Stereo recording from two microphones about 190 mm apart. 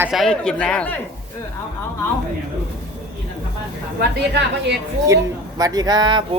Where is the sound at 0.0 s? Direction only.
Centre (ahead or behind).